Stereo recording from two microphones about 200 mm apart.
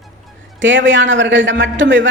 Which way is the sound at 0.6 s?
70° right (ahead or behind).